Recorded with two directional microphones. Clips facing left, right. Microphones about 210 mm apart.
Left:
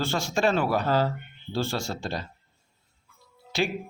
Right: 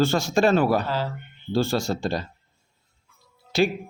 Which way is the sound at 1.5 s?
40° right (ahead or behind).